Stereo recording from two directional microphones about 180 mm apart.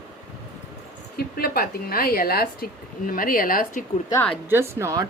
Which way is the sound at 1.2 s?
60° left (ahead or behind).